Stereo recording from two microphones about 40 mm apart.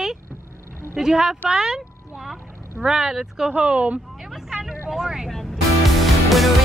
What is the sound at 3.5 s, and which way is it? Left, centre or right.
Speech, right.